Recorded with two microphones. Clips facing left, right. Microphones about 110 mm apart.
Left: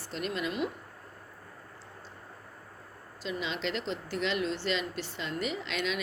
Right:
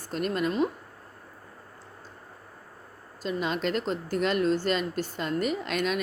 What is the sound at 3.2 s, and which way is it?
Speech, 45° right (ahead or behind).